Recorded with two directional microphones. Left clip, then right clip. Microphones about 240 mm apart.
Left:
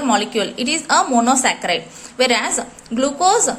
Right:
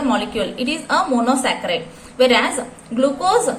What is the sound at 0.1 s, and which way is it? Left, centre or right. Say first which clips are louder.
A woman's voice: left 2 dB; left.